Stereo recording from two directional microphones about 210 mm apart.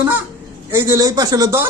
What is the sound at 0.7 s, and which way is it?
Speech, 15° right (ahead or behind).